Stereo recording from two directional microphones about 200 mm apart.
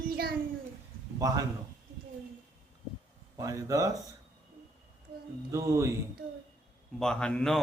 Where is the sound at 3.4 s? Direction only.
15° right (ahead or behind).